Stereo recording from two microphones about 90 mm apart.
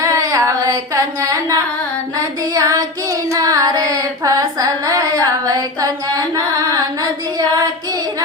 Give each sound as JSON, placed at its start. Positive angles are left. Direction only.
{"t": 0.0, "sound": "carnatic music", "side_deg": -40}
{"t": 2.1, "sound": "music", "side_deg": -40}
{"t": 3.3, "sound": "carnatic music", "side_deg": -40}